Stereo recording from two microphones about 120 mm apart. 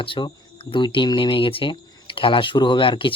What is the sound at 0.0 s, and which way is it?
Speech, 45° left (ahead or behind).